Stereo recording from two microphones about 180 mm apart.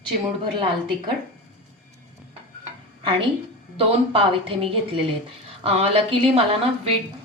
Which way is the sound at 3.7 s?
30° right (ahead or behind).